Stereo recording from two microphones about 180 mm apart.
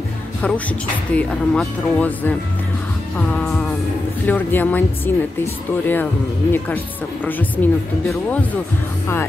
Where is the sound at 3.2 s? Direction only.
Centre (ahead or behind).